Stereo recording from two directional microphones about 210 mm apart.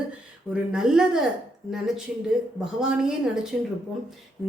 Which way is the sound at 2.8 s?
5° right (ahead or behind).